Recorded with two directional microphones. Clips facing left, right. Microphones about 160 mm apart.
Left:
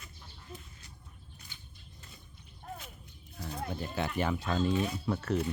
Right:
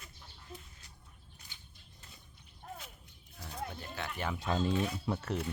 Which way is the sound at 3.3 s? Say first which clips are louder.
Left 3 dB; 5° right (ahead or behind).